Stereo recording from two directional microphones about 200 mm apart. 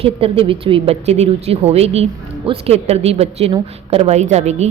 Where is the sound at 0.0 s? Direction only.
25° right (ahead or behind).